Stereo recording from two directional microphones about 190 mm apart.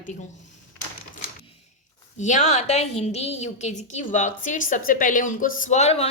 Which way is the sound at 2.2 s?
40° left (ahead or behind).